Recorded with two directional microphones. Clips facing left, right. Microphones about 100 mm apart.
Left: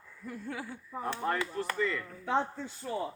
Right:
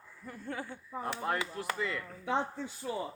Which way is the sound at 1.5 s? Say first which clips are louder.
Left 3 dB; 5° right (ahead or behind).